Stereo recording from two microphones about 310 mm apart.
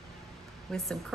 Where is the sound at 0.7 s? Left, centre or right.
Centre.